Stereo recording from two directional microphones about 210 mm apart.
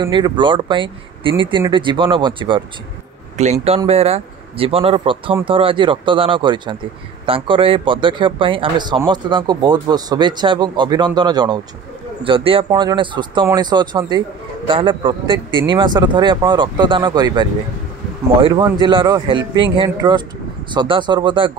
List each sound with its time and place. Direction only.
0.0 s speech: 20° right (ahead or behind)
3.6 s speech: 30° right (ahead or behind)